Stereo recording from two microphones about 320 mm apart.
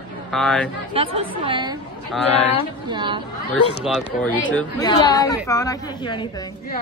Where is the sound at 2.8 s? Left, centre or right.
Centre.